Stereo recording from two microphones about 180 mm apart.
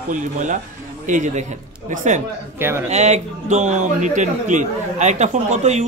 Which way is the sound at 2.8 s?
40° right (ahead or behind).